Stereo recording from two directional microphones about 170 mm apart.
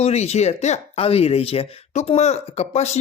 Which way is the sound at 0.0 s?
40° left (ahead or behind).